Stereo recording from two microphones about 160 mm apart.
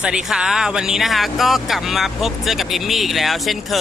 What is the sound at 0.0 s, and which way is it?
Speech, 5° right (ahead or behind).